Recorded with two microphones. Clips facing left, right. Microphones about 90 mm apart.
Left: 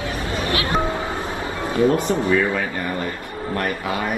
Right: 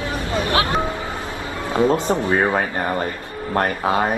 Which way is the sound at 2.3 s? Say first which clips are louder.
Right 1 dB; 45° right (ahead or behind).